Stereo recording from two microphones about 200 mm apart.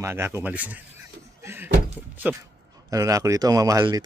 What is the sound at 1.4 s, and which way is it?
Door, 10° right (ahead or behind).